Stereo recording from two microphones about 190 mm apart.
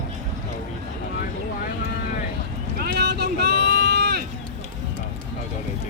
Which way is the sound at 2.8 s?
60° right (ahead or behind).